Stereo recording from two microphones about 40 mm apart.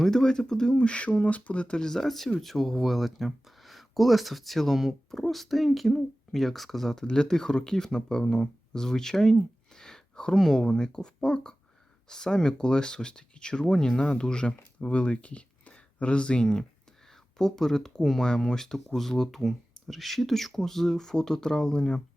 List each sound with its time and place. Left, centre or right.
0.0 s speech: centre
0.8 s speech: left
1.8 s speech: centre
7.0 s speech: centre